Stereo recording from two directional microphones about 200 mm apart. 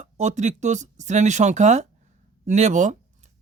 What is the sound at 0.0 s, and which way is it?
Speech, 35° right (ahead or behind).